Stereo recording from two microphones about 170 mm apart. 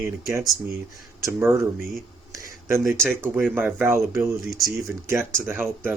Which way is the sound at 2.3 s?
15° right (ahead or behind).